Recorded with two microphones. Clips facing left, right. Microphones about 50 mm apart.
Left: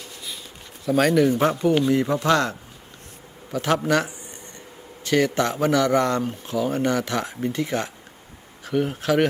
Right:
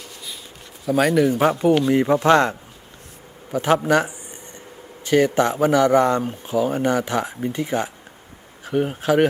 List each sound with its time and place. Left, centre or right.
0.9 s speech: centre
1.3 s speech: centre